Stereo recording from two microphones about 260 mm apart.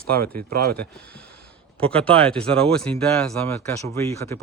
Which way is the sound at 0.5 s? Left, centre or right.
Right.